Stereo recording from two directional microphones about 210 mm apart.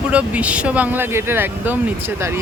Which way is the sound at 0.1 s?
5° right (ahead or behind).